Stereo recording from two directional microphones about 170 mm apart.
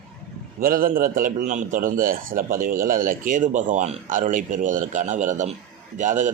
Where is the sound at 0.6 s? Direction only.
55° right (ahead or behind).